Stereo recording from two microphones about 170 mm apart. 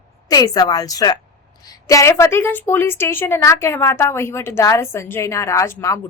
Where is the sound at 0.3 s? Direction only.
20° left (ahead or behind).